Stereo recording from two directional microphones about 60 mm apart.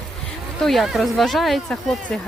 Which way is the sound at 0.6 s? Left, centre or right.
Centre.